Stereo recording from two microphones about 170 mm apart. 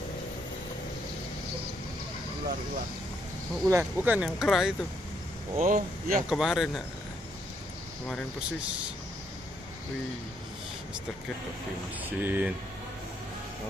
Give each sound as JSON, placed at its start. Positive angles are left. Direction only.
{"t": 3.6, "sound": "speech", "side_deg": -15}
{"t": 5.6, "sound": "speech", "side_deg": -50}
{"t": 6.2, "sound": "speech", "side_deg": 0}
{"t": 12.2, "sound": "speech", "side_deg": -10}